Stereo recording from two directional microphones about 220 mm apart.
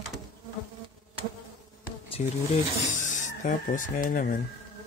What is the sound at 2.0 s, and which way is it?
Speech, 30° left (ahead or behind).